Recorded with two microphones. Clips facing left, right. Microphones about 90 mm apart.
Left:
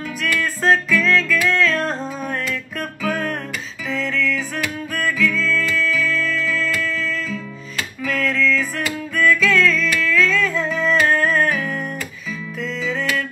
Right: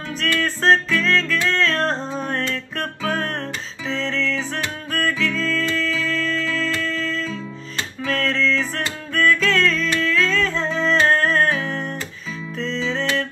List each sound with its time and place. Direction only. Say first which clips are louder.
0.3 s music: even; 30° right (ahead or behind)